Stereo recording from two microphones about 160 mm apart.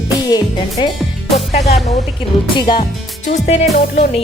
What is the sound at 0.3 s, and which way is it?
Speech, 25° left (ahead or behind).